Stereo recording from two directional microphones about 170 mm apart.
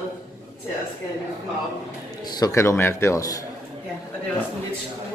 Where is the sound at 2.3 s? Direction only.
20° left (ahead or behind).